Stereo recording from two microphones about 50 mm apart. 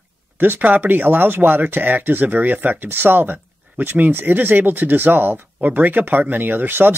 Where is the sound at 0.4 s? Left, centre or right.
Right.